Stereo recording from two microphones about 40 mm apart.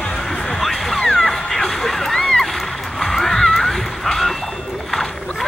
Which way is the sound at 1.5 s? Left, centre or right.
Centre.